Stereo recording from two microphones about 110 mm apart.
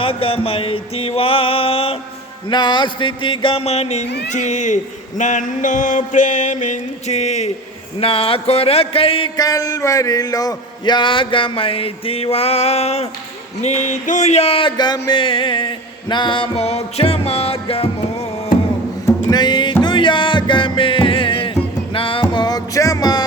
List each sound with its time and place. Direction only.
0.0 s music: 55° left (ahead or behind)
2.5 s a sound: 45° left (ahead or behind)
3.6 s a man's voice: 75° left (ahead or behind)
7.9 s music: 60° left (ahead or behind)
9.4 s a sound: 35° left (ahead or behind); by 13.1 s 70° left (ahead or behind)
13.6 s speech: 90° left; by 14.7 s 65° left (ahead or behind)
14.8 s a sound: 40° left (ahead or behind); by 17.8 s 60° left (ahead or behind)
19.3 s music: 40° left (ahead or behind)
22.3 s music: 40° left (ahead or behind)